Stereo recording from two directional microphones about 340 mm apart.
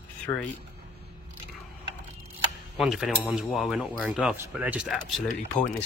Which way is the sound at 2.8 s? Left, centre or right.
Centre.